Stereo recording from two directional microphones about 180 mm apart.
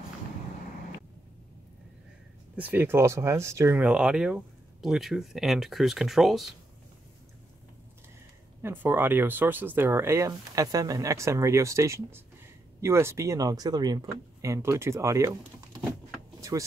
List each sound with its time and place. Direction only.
2.5 s speech: 10° right (ahead or behind)
8.6 s speech: 10° right (ahead or behind)
16.3 s vehicle: 20° right (ahead or behind)